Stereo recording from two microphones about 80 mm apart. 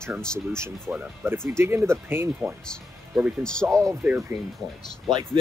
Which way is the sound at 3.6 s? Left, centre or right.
Right.